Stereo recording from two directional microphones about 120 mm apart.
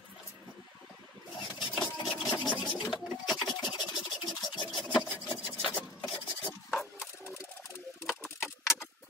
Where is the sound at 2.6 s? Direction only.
40° left (ahead or behind).